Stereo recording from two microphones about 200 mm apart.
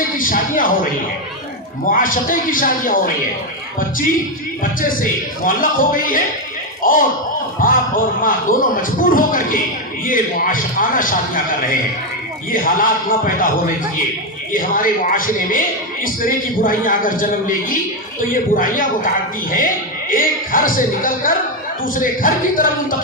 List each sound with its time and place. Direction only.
0.0 s speech: 45° left (ahead or behind)
1.9 s a man's voice: 45° left (ahead or behind)
4.6 s a man's voice: 45° left (ahead or behind)